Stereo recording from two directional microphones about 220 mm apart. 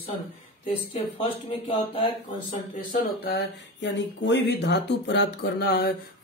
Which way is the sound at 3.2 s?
50° left (ahead or behind).